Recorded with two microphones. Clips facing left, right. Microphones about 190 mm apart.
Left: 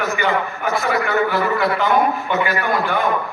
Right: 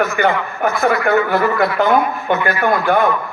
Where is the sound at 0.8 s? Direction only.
50° right (ahead or behind).